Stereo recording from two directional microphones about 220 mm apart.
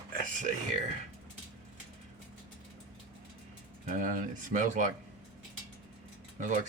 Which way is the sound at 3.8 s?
35° right (ahead or behind).